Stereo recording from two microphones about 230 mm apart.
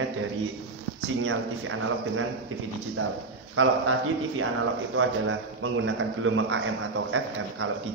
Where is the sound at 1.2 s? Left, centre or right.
Right.